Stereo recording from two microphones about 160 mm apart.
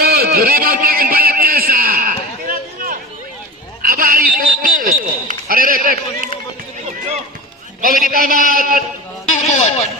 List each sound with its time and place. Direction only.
0.0 s a sound: 75° right (ahead or behind)
7.8 s a man's voice: 60° right (ahead or behind)
9.5 s speech: 45° left (ahead or behind)